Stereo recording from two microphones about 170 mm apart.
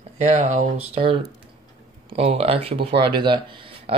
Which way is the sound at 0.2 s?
45° right (ahead or behind).